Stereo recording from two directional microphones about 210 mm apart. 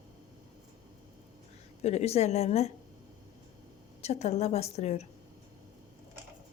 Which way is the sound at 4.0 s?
30° left (ahead or behind).